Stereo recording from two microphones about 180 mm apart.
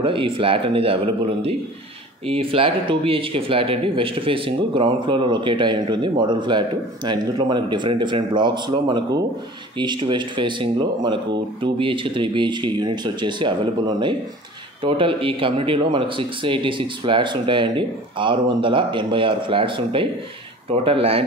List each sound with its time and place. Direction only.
0.0 s a man's voice: 30° right (ahead or behind)